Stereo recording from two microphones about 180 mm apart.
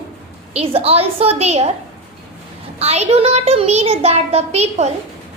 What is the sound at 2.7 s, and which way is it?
A child's voice, 35° right (ahead or behind).